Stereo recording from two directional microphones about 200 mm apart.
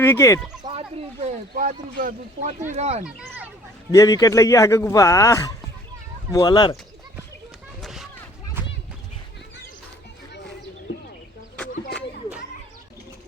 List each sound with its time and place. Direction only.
0.0 s speech: 15° left (ahead or behind)
0.3 s speech: 5° right (ahead or behind)
0.6 s speech: 25° right (ahead or behind)
1.5 s speech: 40° right (ahead or behind)
3.0 s speech: 5° right (ahead or behind)
3.9 s speech: 15° left (ahead or behind)
7.8 s a sound: centre (ahead or behind)